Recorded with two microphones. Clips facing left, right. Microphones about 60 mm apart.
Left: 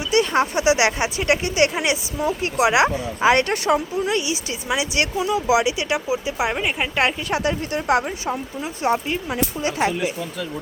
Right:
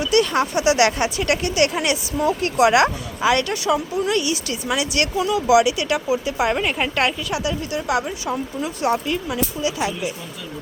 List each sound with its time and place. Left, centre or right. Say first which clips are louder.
0.0 s speech: right 1 dB; left
7.3 s speech: left 2 dB; left